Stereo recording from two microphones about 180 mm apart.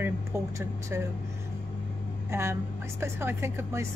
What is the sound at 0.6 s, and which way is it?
Speech, 15° right (ahead or behind).